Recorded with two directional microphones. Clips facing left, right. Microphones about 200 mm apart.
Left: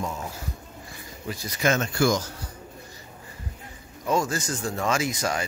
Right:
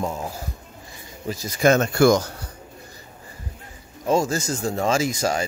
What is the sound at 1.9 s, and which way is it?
Speech, 65° right (ahead or behind).